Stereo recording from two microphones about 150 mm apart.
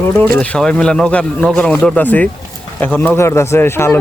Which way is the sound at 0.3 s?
5° left (ahead or behind).